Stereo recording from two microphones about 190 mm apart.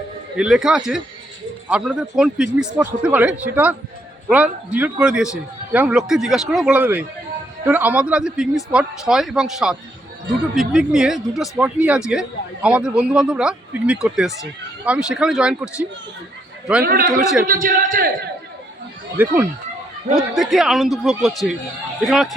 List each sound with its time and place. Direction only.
0.3 s a man's voice: 5° right (ahead or behind)
16.8 s a man's voice: 50° right (ahead or behind)
19.1 s a man's voice: 10° right (ahead or behind)